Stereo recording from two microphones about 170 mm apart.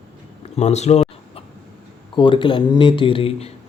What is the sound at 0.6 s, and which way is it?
Chicken, 40° left (ahead or behind).